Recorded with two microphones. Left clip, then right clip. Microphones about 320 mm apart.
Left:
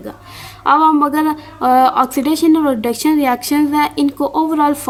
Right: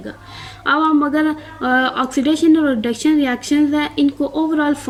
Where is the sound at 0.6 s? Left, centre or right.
Centre.